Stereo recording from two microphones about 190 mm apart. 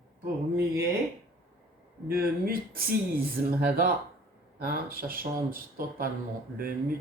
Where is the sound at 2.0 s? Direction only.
50° right (ahead or behind).